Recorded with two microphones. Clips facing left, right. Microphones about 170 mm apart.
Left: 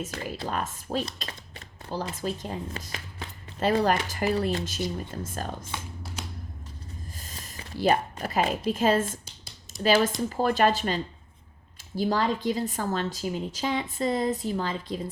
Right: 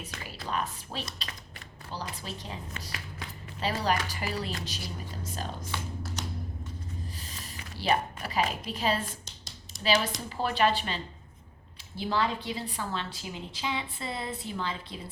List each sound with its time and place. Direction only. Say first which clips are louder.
0.0 s a woman's voice: left 8 dB; 45° left (ahead or behind)
5.6 s music: right 1 dB; 20° left (ahead or behind)
7.3 s a woman's voice: left 6 dB; 45° left (ahead or behind)